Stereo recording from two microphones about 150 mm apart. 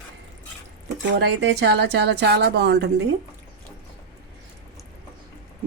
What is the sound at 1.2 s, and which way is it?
A woman's voice, 90° right.